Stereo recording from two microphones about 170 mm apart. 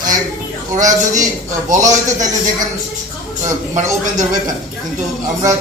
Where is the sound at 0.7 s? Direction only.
45° right (ahead or behind).